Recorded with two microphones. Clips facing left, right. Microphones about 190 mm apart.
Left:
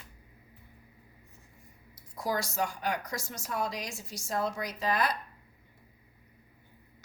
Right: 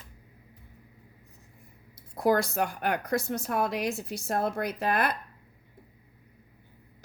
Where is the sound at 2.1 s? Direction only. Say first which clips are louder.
Right 7 dB; 60° right (ahead or behind).